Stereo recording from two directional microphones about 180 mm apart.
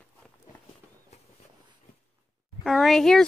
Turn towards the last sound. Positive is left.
turn(degrees=0)  # may be behind; listen again after turning